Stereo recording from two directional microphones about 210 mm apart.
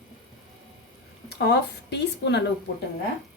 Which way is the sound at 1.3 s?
50° left (ahead or behind).